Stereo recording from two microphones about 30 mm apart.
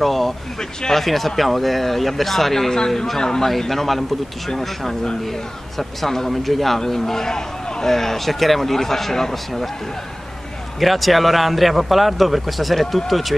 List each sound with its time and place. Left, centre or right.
0.0 s a man's voice: centre
0.6 s speech: centre
0.9 s a man's voice: centre
3.2 s a man's voice: centre
3.4 s a man's voice: centre
7.9 s a man's voice: centre
10.8 s a man's voice: centre